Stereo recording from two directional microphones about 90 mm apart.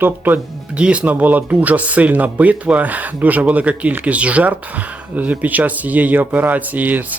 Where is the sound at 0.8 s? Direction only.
15° right (ahead or behind).